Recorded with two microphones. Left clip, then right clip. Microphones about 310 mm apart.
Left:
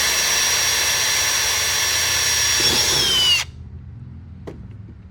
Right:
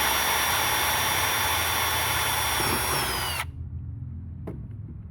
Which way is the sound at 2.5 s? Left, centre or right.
Right.